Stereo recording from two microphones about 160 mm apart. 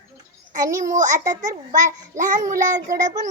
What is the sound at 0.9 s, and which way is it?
Child singing, 50° right (ahead or behind).